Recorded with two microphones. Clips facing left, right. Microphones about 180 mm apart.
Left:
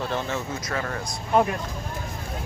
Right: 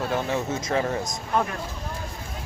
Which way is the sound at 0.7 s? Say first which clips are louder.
Right 6 dB; 25° right (ahead or behind).